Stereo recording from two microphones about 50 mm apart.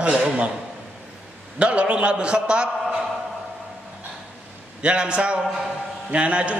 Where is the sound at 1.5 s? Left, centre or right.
Right.